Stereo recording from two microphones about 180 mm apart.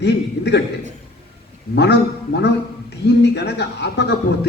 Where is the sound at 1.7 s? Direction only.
70° left (ahead or behind).